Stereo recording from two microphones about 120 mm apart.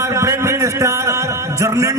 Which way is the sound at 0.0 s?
25° right (ahead or behind).